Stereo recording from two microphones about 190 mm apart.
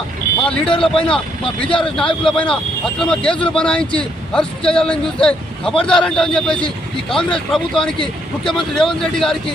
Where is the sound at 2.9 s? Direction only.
5° left (ahead or behind).